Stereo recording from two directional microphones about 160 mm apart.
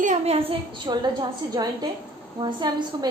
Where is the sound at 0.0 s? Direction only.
50° right (ahead or behind).